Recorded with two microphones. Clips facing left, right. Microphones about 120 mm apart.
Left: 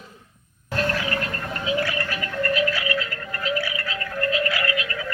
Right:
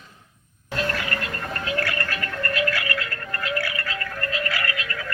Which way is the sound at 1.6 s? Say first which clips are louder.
Left 3 dB; 10° left (ahead or behind).